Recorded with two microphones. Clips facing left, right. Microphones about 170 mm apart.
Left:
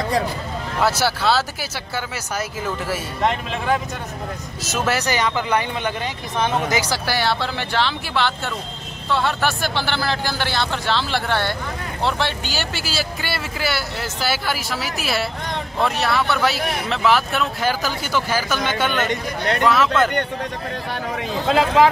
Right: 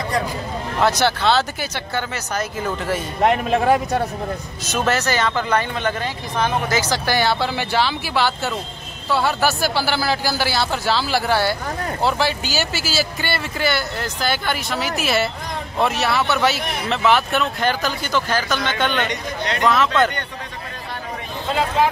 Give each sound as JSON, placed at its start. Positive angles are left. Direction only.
{"t": 0.7, "sound": "speech", "side_deg": 5}
{"t": 3.4, "sound": "speech", "side_deg": -45}
{"t": 4.6, "sound": "speech", "side_deg": 5}
{"t": 19.0, "sound": "speech", "side_deg": 50}
{"t": 19.6, "sound": "speech", "side_deg": 0}
{"t": 21.5, "sound": "speech", "side_deg": 90}